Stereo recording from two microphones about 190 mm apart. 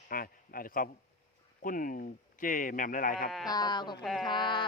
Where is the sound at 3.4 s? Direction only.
20° left (ahead or behind).